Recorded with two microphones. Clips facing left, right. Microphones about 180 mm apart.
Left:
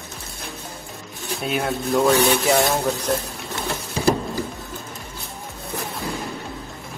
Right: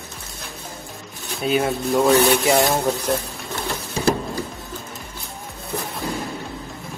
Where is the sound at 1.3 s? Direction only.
Centre (ahead or behind).